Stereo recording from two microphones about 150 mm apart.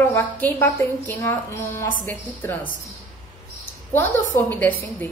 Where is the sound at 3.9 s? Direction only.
15° left (ahead or behind).